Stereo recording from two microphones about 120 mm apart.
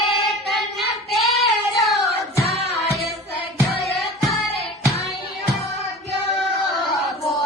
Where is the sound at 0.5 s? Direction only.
Centre (ahead or behind).